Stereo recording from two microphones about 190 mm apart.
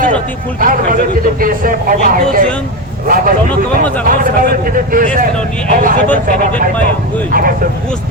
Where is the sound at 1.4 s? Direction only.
50° right (ahead or behind).